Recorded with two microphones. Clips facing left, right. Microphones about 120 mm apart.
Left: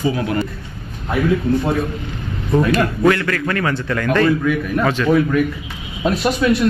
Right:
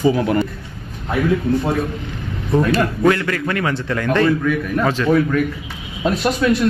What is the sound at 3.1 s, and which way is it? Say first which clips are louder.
Speech: left 1 dB; 20° right (ahead or behind).